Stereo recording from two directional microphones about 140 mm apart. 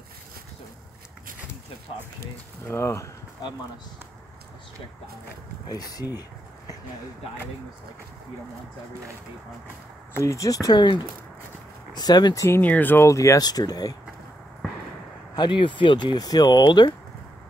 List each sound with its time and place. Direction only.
2.6 s speech: 20° left (ahead or behind)
5.7 s speech: 25° left (ahead or behind)
10.2 s speech: 25° left (ahead or behind)
12.4 s speech: 15° left (ahead or behind)
15.3 s speech: 35° left (ahead or behind)